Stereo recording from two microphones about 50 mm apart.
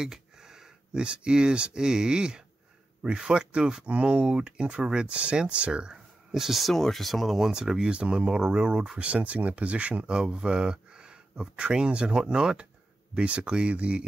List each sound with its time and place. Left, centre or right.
0.0 s speech: centre
6.3 s speech: centre; by 14.0 s right